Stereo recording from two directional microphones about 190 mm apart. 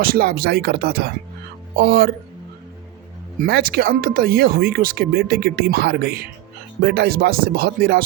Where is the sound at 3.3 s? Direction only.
55° right (ahead or behind).